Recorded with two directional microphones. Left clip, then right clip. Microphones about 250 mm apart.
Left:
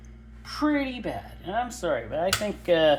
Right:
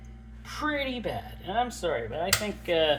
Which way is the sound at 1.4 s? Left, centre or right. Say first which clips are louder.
Left 1 dB; left.